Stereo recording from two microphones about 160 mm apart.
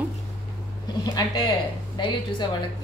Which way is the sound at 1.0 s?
25° left (ahead or behind).